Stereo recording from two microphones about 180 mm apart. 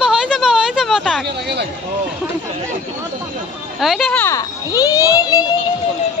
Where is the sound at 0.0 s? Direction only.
5° right (ahead or behind).